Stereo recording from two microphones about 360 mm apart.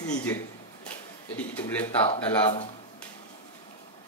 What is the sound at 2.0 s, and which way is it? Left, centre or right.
Speech, centre.